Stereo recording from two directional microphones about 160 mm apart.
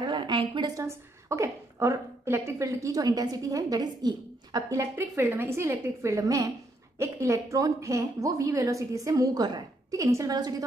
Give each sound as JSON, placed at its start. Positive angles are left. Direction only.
{"t": 0.0, "sound": "a woman's voice", "side_deg": -30}